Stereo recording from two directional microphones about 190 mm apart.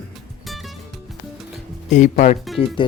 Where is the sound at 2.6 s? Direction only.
30° left (ahead or behind).